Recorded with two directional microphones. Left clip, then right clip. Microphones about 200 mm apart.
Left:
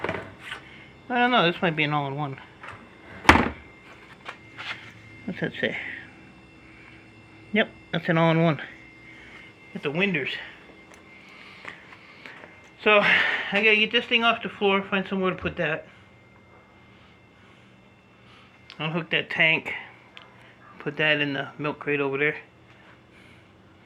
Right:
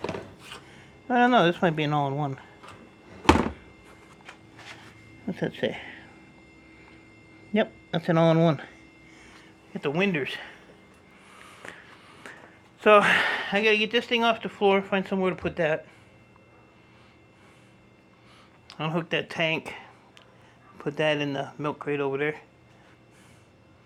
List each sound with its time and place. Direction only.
0.4 s speech: 35° right (ahead or behind)
5.3 s speech: 15° right (ahead or behind)
7.5 s speech: 10° right (ahead or behind)
9.7 s speech: 20° right (ahead or behind)
11.3 s a sound: 30° right (ahead or behind)
12.8 s speech: 25° right (ahead or behind)
18.8 s speech: 20° right (ahead or behind)